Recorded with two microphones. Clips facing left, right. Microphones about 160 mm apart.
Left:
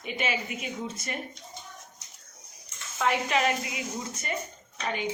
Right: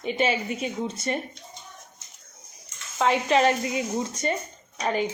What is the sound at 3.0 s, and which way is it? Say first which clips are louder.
A woman's voice: right 5 dB; 30° right (ahead or behind).